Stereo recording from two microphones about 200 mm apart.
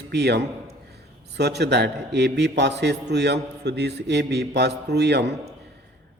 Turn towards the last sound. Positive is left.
turn(degrees=-55)  # may be behind; listen again after turning